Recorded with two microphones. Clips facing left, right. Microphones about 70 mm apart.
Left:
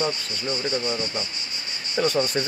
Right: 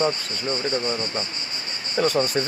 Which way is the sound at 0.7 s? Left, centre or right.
Right.